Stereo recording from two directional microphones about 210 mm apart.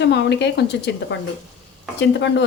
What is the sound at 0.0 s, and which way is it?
Speech, 55° left (ahead or behind).